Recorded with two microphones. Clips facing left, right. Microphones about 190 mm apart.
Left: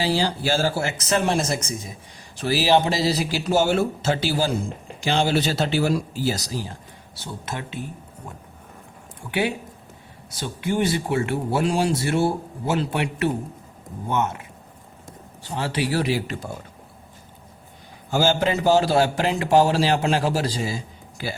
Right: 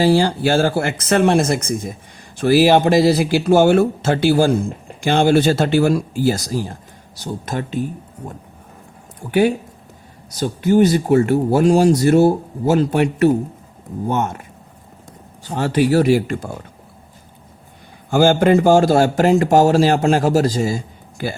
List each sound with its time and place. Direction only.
0.0 s a man's voice: 50° right (ahead or behind)
9.2 s a man's voice: 40° right (ahead or behind)
15.4 s a man's voice: 45° right (ahead or behind)
18.1 s a man's voice: 55° right (ahead or behind)